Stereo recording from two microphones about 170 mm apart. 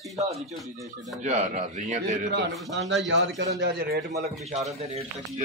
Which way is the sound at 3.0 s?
90° right.